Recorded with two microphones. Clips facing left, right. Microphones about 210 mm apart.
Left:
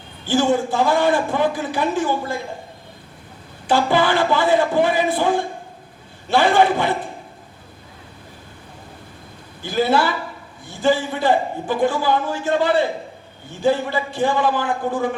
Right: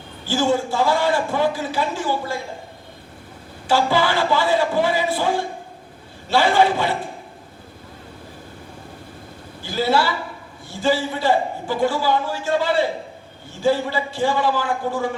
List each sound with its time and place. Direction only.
0.3 s a man's voice: 20° left (ahead or behind)
3.7 s a man's voice: 20° left (ahead or behind)
9.6 s a man's voice: 20° left (ahead or behind)